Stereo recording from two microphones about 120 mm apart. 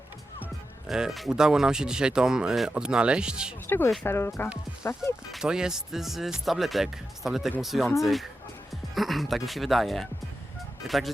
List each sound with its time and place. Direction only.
0.9 s speech: 5° right (ahead or behind)
3.7 s speech: 15° left (ahead or behind)
5.3 s speech: 5° right (ahead or behind)